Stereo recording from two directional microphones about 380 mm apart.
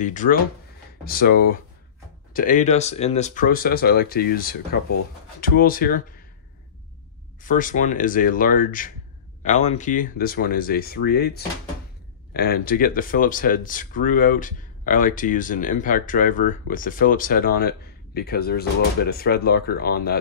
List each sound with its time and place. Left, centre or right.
0.0 s speech: centre
7.4 s speech: left